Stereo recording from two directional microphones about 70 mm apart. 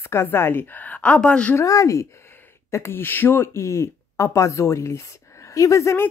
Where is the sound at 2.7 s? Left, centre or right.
Left.